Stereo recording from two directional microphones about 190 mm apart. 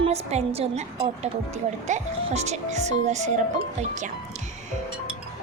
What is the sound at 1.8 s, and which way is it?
Speech, 35° right (ahead or behind).